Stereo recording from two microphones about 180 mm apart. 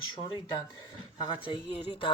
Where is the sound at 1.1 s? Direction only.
25° left (ahead or behind).